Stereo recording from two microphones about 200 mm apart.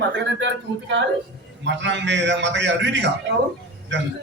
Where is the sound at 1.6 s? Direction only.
65° right (ahead or behind).